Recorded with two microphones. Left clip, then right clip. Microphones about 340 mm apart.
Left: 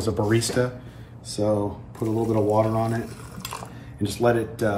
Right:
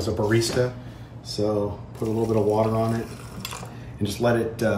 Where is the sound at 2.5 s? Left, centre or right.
Centre.